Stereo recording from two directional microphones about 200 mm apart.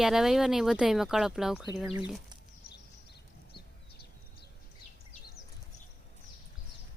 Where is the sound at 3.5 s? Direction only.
55° left (ahead or behind).